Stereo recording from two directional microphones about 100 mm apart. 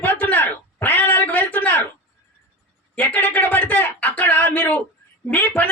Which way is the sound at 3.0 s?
20° left (ahead or behind).